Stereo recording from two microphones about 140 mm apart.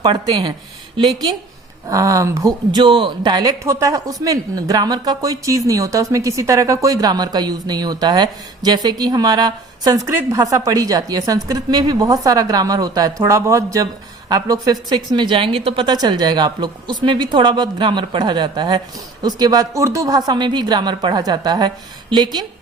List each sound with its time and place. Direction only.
0.0 s a woman's voice: 35° right (ahead or behind)
1.9 s speech: 25° right (ahead or behind)
2.8 s a woman's voice: 35° right (ahead or behind)